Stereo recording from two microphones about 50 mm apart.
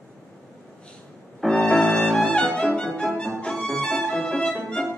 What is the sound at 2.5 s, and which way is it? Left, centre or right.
Music, centre.